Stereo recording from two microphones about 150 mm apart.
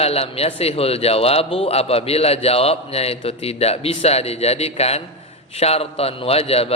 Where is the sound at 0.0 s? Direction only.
40° left (ahead or behind).